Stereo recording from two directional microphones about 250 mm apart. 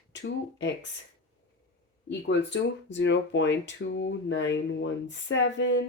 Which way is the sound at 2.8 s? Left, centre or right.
Left.